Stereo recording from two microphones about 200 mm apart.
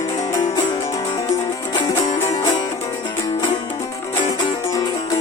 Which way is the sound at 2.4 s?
20° left (ahead or behind).